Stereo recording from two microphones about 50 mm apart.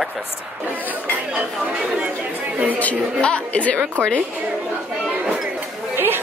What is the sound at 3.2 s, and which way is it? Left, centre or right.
Speech, left.